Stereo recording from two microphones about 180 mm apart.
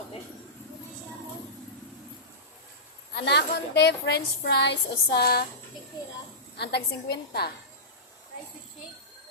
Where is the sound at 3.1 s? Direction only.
65° left (ahead or behind).